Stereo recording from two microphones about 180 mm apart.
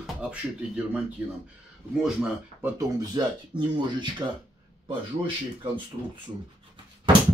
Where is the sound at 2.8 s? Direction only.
20° right (ahead or behind).